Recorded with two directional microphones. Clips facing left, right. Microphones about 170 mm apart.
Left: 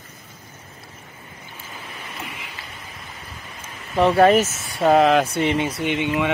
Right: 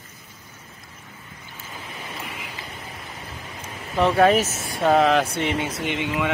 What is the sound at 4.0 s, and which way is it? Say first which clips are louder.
Speech: left 3 dB; centre (ahead or behind).